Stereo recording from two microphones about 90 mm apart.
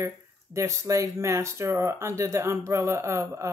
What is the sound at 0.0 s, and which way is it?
Speech, 35° right (ahead or behind).